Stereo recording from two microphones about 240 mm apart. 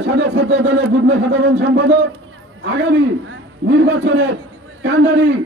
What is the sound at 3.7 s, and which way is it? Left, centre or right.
Speech, right.